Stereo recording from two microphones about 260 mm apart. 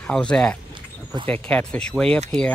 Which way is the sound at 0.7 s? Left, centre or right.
Centre.